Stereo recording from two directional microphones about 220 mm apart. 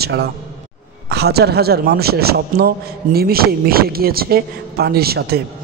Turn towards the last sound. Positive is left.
turn(degrees=-45)  # may be behind; listen again after turning